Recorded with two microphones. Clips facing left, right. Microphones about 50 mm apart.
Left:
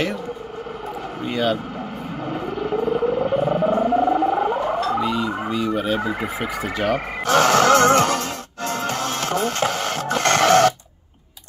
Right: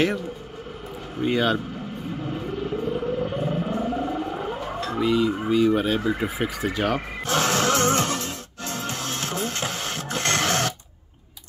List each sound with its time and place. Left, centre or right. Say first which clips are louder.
1.2 s a man's voice: even; centre
2.3 s a sound: left 6 dB; left
5.0 s speech: right 1 dB; centre
5.9 s speech: left 1 dB; left
6.2 s speech: left 1 dB; centre
7.2 s music: left 8 dB; left